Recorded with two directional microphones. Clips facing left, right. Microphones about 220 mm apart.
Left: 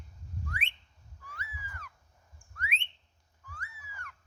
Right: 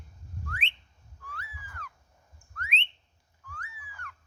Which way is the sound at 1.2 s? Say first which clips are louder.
Right 1 dB; 10° left (ahead or behind).